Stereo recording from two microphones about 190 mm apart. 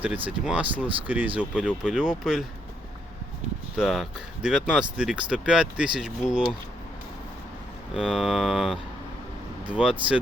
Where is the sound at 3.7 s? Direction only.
Centre (ahead or behind).